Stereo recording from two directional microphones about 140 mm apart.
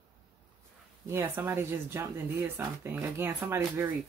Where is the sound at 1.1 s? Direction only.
15° right (ahead or behind).